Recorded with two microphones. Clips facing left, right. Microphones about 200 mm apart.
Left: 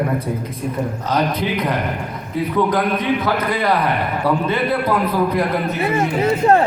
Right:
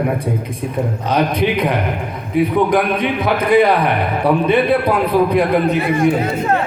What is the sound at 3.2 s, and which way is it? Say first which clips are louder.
A man's voice: right 6 dB; 15° right (ahead or behind).